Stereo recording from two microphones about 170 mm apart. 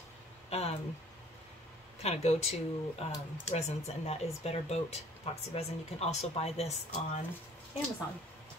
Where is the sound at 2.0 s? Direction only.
40° left (ahead or behind).